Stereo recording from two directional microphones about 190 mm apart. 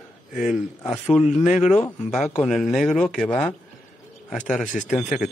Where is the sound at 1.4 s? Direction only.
40° left (ahead or behind).